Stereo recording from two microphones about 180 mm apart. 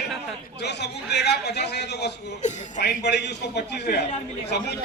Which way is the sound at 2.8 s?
70° left (ahead or behind).